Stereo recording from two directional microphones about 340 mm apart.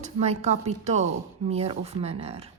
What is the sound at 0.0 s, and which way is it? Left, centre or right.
A woman's voice, centre.